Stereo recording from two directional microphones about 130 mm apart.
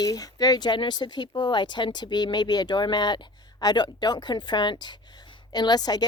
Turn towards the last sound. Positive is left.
turn(degrees=30)  # may be behind; listen again after turning